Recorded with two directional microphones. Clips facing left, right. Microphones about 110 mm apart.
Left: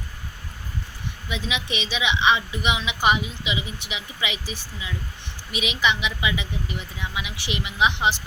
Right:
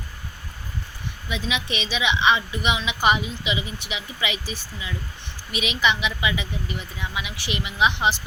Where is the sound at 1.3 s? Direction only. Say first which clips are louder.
Right 1 dB; 20° left (ahead or behind).